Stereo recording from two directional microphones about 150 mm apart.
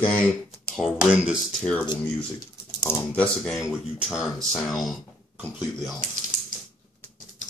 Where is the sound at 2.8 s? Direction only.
15° left (ahead or behind).